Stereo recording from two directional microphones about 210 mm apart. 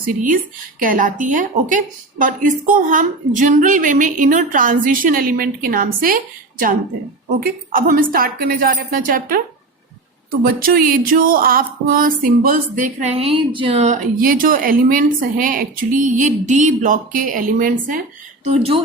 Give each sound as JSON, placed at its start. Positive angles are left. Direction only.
{"t": 0.0, "sound": "a woman's voice", "side_deg": -40}
{"t": 10.4, "sound": "speech", "side_deg": -45}
{"t": 18.4, "sound": "speech", "side_deg": -30}